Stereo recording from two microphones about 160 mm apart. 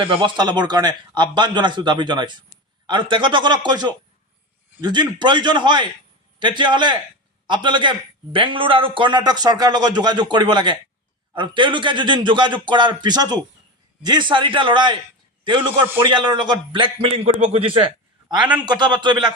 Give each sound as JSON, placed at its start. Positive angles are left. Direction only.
{"t": 0.0, "sound": "a man's voice", "side_deg": -35}